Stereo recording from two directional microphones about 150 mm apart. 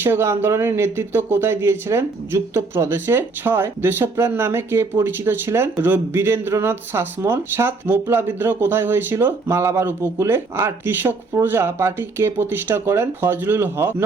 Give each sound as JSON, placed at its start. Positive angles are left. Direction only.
{"t": 0.0, "sound": "speech", "side_deg": -15}